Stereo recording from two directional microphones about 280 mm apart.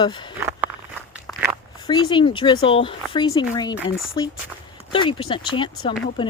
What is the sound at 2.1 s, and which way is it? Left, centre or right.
Speech, centre.